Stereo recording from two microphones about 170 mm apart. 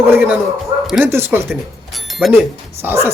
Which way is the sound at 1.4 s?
Centre (ahead or behind).